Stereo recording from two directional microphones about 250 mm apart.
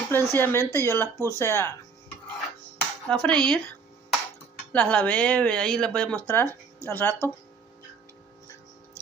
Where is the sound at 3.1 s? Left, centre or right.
Centre.